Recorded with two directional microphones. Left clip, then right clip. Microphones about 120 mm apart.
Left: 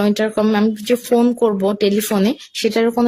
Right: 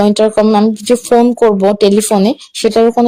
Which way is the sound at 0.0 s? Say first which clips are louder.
Right 8 dB; 35° right (ahead or behind).